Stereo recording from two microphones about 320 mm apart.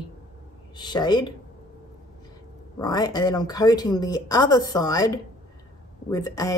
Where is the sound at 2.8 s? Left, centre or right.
Centre.